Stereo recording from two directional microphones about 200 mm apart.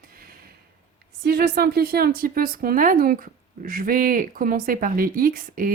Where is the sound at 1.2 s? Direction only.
50° right (ahead or behind).